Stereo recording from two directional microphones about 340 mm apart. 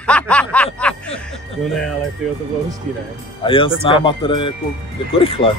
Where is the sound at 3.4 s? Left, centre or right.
Centre.